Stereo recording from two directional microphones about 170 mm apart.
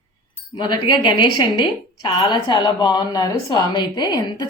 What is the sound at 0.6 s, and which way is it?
A woman's voice, 25° left (ahead or behind).